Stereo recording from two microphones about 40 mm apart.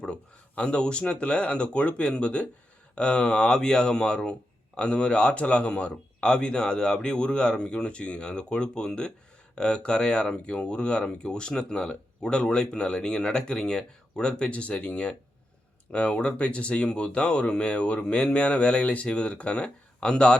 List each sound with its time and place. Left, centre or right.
0.0 s speech: left